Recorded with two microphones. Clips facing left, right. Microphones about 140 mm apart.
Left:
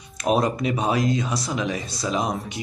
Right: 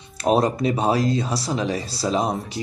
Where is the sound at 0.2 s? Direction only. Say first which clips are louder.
Right 2 dB; 30° right (ahead or behind).